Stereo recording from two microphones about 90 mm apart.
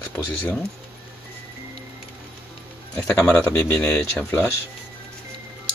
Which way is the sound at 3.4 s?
35° left (ahead or behind).